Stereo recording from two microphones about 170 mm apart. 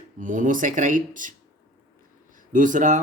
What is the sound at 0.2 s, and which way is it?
Speech, 50° right (ahead or behind).